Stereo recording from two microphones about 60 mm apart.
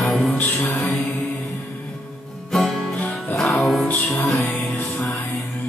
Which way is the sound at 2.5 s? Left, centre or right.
Centre.